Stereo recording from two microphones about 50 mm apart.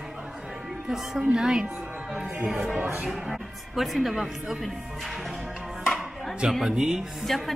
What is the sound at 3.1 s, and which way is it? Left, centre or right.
Speech, centre.